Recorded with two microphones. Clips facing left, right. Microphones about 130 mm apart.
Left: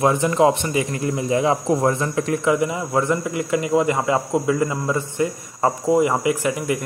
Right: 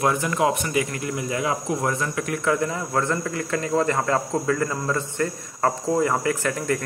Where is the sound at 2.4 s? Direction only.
15° left (ahead or behind).